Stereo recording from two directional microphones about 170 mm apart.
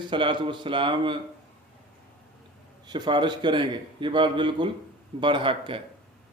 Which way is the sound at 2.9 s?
25° right (ahead or behind).